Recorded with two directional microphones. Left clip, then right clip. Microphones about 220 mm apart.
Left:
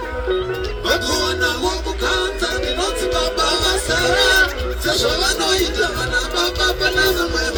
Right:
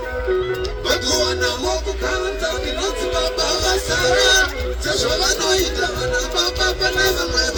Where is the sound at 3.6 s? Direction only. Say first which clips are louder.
Left 1 dB; 20° right (ahead or behind).